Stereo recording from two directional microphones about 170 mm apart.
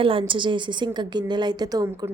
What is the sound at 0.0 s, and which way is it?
Speech, 30° right (ahead or behind).